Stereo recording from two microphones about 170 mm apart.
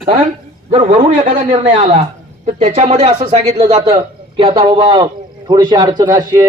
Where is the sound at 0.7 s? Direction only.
40° right (ahead or behind).